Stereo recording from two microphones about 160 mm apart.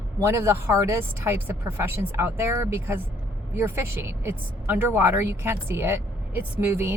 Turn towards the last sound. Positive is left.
turn(degrees=-15)  # may be behind; listen again after turning